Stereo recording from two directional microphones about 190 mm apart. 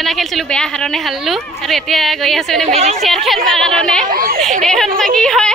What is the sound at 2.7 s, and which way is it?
Speech, 35° right (ahead or behind).